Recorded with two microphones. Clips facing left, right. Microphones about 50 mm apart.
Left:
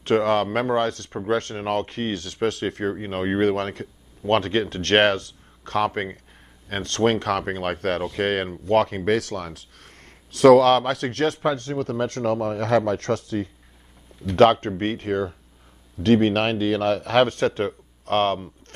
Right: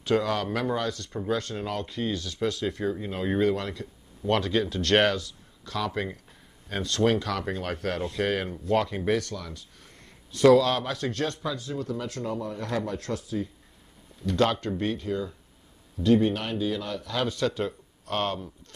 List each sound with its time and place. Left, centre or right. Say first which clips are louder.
0.0 s speech: left 6 dB; left
4.3 s speech: left 4 dB; left